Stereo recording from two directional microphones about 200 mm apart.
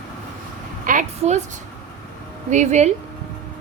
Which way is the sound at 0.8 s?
40° right (ahead or behind).